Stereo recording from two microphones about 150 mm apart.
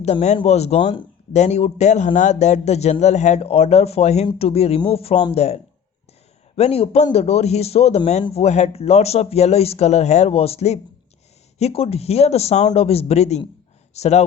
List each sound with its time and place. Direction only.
0.0 s speech: 45° left (ahead or behind)
1.3 s speech: 50° left (ahead or behind)
6.6 s speech: 45° left (ahead or behind)